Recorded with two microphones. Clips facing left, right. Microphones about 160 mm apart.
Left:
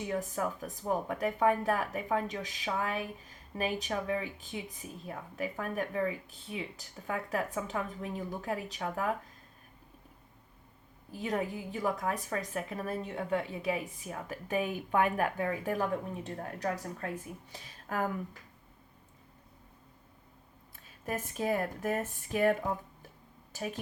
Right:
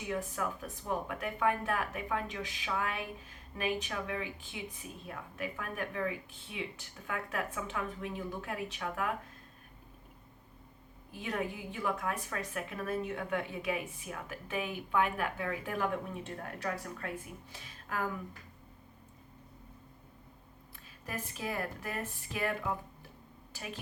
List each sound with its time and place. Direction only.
0.1 s a woman's voice: 40° left (ahead or behind)
11.1 s a woman's voice: 40° left (ahead or behind)
21.0 s a woman's voice: 45° left (ahead or behind)